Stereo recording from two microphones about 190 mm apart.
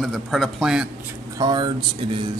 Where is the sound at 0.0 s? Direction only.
Centre (ahead or behind).